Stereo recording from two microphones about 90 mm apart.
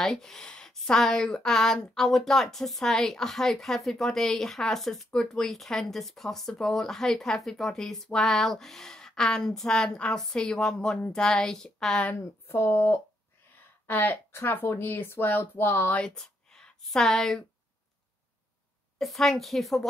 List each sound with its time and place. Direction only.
0.0 s a woman's voice: 5° left (ahead or behind)
12.4 s speech: 25° left (ahead or behind)
16.2 s speech: 5° left (ahead or behind)
18.9 s a woman's voice: 5° left (ahead or behind)